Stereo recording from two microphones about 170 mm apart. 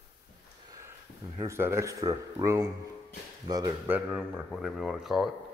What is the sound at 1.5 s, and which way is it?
Speech, 15° right (ahead or behind).